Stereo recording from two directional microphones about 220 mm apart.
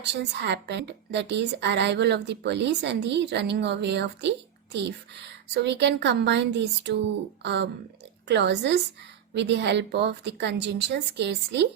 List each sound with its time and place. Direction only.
0.0 s a woman's voice: 50° right (ahead or behind)